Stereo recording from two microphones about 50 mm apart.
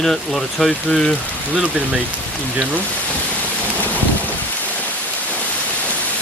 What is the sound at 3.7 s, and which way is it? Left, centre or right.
Boat, left.